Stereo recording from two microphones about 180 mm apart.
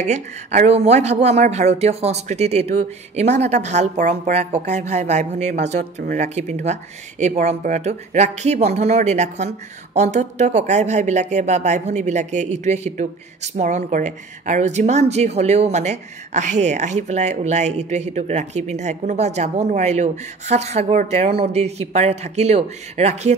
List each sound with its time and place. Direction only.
0.0 s a woman's voice: 40° right (ahead or behind)